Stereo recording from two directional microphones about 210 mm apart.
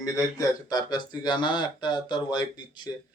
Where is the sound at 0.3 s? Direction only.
20° left (ahead or behind).